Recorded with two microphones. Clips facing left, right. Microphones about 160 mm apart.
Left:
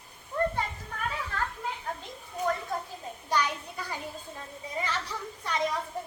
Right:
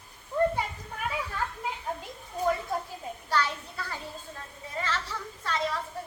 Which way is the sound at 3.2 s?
15° left (ahead or behind).